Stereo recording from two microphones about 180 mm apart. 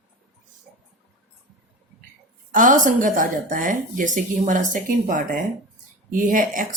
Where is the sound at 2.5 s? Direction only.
45° right (ahead or behind).